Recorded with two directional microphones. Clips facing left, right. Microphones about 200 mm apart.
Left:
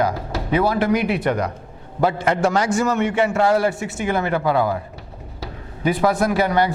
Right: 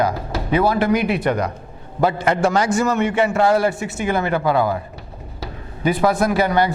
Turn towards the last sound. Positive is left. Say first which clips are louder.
# right 1 dB
turn(degrees=-10)  # may be behind; listen again after turning